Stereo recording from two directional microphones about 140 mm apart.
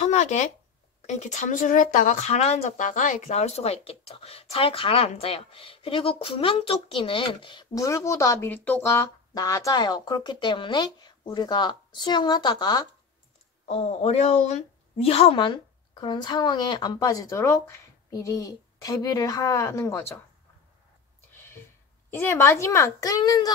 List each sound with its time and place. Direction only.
0.0 s a sound: 55° left (ahead or behind)
1.0 s speech: 55° left (ahead or behind); by 12.8 s 30° left (ahead or behind)
13.7 s a woman's voice: 45° left (ahead or behind); by 20.2 s 20° left (ahead or behind)
22.1 s a woman's voice: 20° left (ahead or behind)